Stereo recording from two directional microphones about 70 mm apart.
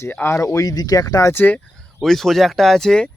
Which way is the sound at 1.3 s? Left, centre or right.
Left.